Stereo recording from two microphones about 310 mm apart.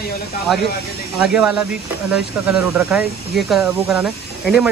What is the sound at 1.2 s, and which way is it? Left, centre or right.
Speech, centre.